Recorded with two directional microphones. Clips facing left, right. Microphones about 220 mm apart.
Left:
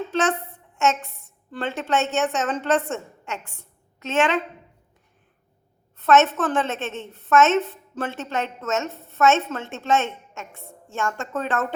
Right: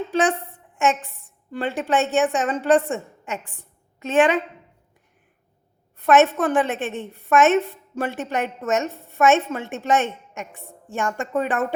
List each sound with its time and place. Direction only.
0.1 s a woman's voice: 15° right (ahead or behind)
6.0 s a woman's voice: 15° right (ahead or behind)